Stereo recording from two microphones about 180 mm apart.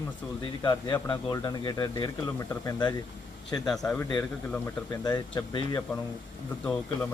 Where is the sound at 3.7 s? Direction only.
5° left (ahead or behind).